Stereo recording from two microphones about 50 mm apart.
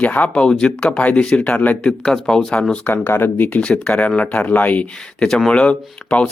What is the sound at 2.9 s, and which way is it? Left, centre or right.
Speech, left.